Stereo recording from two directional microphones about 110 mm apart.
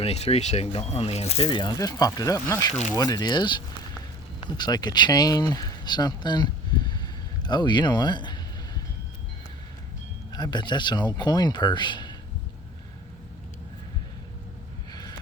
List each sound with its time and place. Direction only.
0.0 s speech: 70° left (ahead or behind)
1.5 s speech: 45° left (ahead or behind)
7.4 s a sound: 45° left (ahead or behind)
10.3 s speech: 40° left (ahead or behind)